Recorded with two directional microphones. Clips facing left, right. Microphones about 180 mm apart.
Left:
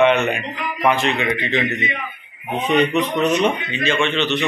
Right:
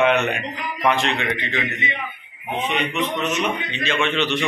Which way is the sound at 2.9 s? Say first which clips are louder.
Left 5 dB; 40° left (ahead or behind).